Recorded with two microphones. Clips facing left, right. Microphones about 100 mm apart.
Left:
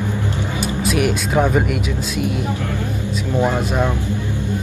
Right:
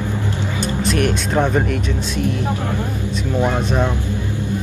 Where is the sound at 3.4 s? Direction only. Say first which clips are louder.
Even; 5° left (ahead or behind).